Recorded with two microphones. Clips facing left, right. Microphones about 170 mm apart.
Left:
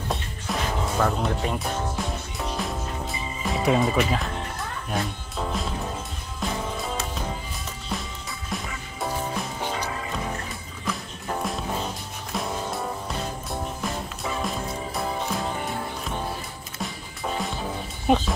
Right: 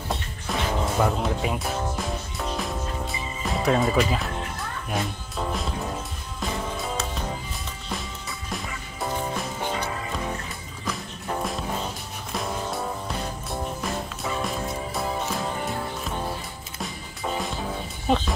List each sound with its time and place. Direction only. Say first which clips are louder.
0.1 s music: even; centre (ahead or behind)
9.0 s music: even; 5° left (ahead or behind)
10.9 s music: even; centre (ahead or behind)
14.2 s music: even; centre (ahead or behind)
16.8 s music: even; centre (ahead or behind)
18.1 s music: left 2 dB; 15° left (ahead or behind)